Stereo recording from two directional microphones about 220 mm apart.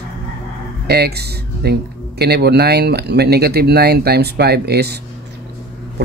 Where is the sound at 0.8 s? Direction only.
45° right (ahead or behind).